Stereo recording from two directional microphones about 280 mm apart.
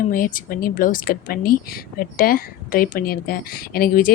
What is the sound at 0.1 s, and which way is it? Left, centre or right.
Speech, left.